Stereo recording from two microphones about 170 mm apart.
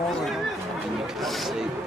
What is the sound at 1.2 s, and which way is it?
Speech, centre (ahead or behind).